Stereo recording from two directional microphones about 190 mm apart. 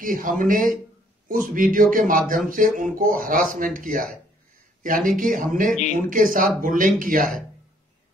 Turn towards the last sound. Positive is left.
turn(degrees=-45)  # may be behind; listen again after turning